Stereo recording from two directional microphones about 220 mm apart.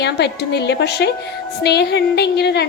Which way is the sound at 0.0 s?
50° left (ahead or behind).